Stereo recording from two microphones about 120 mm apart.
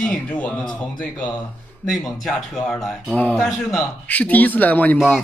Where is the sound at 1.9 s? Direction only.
Centre (ahead or behind).